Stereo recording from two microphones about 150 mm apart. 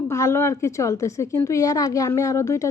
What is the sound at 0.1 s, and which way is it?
A woman's voice, 15° left (ahead or behind).